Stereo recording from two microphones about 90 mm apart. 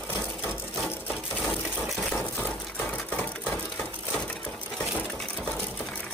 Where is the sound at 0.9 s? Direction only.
20° left (ahead or behind).